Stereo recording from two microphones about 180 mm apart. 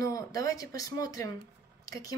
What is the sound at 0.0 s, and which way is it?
Speech, 20° left (ahead or behind).